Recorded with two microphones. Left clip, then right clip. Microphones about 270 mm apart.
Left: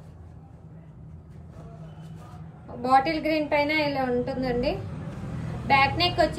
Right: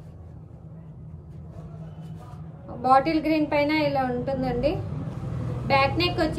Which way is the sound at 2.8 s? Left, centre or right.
Centre.